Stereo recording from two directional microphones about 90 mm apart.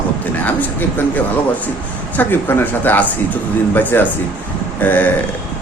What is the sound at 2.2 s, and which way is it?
A man's voice, 20° left (ahead or behind).